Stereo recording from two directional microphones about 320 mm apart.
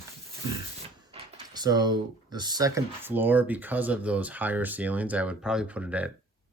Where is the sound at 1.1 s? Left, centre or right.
Centre.